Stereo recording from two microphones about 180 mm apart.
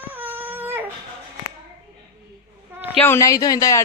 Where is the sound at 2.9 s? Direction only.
15° left (ahead or behind).